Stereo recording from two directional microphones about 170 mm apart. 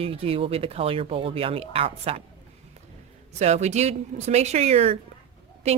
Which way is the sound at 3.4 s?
40° right (ahead or behind).